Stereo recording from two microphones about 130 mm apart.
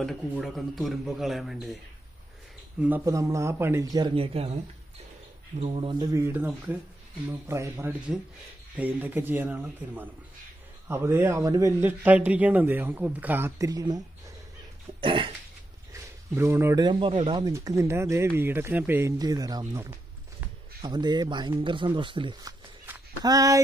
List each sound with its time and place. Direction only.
0.0 s speech: 5° left (ahead or behind)
3.1 s speech: 25° right (ahead or behind)
4.1 s speech: 45° right (ahead or behind)
5.6 s speech: 45° right (ahead or behind)
6.1 s a man's voice: 15° right (ahead or behind)
11.8 s a man's voice: 15° right (ahead or behind)
13.6 s speech: 25° right (ahead or behind)
15.0 s a sound: 40° right (ahead or behind)
15.9 s a sound: 20° right (ahead or behind)
17.5 s speech: 25° right (ahead or behind)
19.1 s speech: 30° right (ahead or behind)
23.2 s speech: 25° right (ahead or behind)